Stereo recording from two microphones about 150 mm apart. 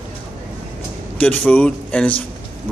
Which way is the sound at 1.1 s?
10° left (ahead or behind).